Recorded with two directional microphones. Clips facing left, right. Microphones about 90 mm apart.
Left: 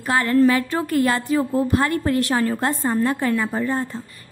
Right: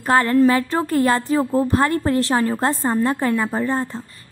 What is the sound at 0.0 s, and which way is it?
A woman's voice, 35° right (ahead or behind).